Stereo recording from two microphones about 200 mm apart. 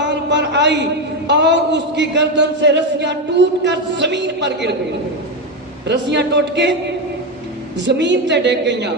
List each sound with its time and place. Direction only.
0.0 s a sound: 60° right (ahead or behind)
1.3 s a man's voice: 60° right (ahead or behind)
5.9 s a man's voice: 60° right (ahead or behind)
7.9 s a man's voice: 60° right (ahead or behind)